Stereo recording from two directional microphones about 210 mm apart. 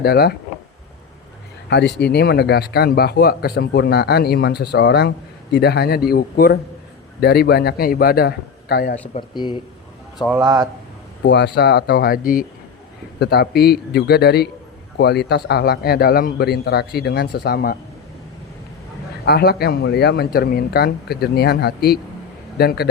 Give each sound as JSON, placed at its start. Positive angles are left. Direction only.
{"t": 0.0, "sound": "speech", "side_deg": 50}
{"t": 1.7, "sound": "speech", "side_deg": 55}
{"t": 9.1, "sound": "speech", "side_deg": 20}
{"t": 10.4, "sound": "speech", "side_deg": -20}
{"t": 11.2, "sound": "speech", "side_deg": 55}
{"t": 19.2, "sound": "speech", "side_deg": 50}